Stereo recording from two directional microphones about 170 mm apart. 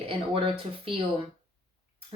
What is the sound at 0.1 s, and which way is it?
Speech, 30° right (ahead or behind).